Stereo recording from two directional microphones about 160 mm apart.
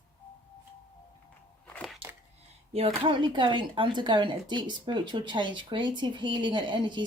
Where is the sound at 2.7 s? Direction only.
35° right (ahead or behind).